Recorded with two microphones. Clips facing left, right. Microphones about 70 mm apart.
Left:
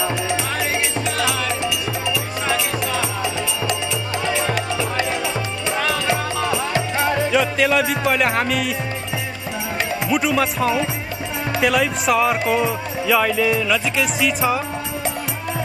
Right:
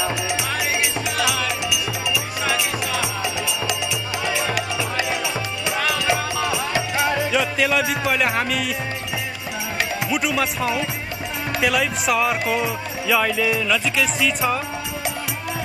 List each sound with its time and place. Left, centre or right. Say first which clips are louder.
1.7 s music: left 1 dB; left
2.4 s music: left 2 dB; centre
4.6 s music: left 2 dB; centre
7.2 s music: left 3 dB; centre
10.0 s speech: left 4 dB; centre